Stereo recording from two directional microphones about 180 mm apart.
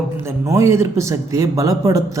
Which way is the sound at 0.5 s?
15° right (ahead or behind).